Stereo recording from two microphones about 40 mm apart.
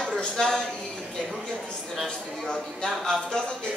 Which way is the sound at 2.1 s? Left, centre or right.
Left.